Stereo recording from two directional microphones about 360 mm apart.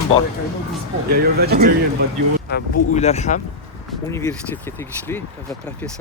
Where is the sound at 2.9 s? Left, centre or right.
Centre.